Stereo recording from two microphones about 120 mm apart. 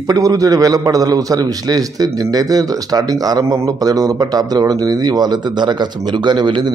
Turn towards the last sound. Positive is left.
turn(degrees=-40)  # may be behind; listen again after turning